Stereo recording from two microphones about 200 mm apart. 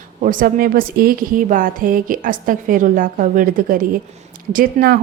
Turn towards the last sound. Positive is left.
turn(degrees=-45)  # may be behind; listen again after turning